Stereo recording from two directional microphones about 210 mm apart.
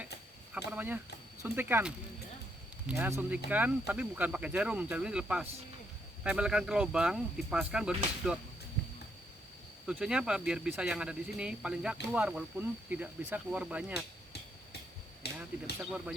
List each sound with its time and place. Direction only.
0.5 s speech: 5° right (ahead or behind)
9.8 s speech: 5° right (ahead or behind)
15.2 s a sound: 50° left (ahead or behind)
15.8 s speech: 5° right (ahead or behind)